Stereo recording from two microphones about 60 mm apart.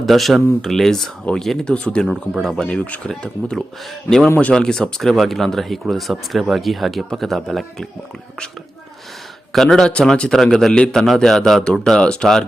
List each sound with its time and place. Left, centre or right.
0.0 s speech: centre
1.6 s a man's voice: centre
2.6 s speech: left
4.4 s speech: left
4.6 s speech: centre
9.5 s a man's voice: centre